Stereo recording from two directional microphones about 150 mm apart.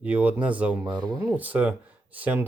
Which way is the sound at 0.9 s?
25° right (ahead or behind).